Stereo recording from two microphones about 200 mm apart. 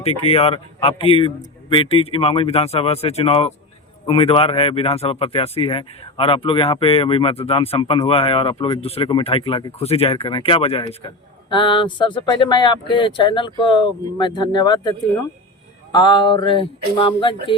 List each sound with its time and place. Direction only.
0.0 s speech: 30° left (ahead or behind)